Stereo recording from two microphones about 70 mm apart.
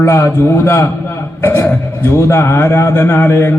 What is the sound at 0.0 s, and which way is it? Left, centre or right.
A man's voice, left.